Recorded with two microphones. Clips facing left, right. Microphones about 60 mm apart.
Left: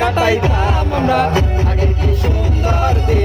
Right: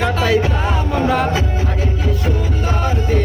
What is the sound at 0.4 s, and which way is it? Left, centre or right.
Music, centre.